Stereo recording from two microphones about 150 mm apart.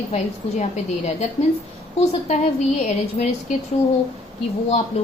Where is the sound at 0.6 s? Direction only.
50° left (ahead or behind).